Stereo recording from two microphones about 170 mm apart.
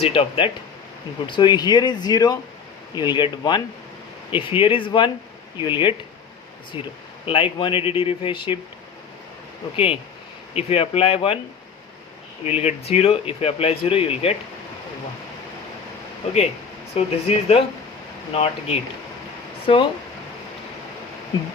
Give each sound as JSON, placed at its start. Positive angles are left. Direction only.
{"t": 0.0, "sound": "speech", "side_deg": 35}
{"t": 9.7, "sound": "speech", "side_deg": 35}
{"t": 12.5, "sound": "speech", "side_deg": 35}
{"t": 16.9, "sound": "speech", "side_deg": 35}